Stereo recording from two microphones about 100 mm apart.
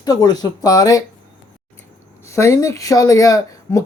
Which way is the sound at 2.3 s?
30° left (ahead or behind).